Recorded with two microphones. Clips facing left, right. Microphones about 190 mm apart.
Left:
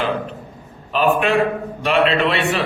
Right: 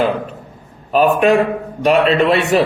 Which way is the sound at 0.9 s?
40° right (ahead or behind).